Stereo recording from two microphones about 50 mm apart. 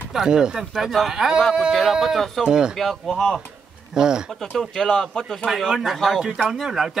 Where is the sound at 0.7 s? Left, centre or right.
Centre.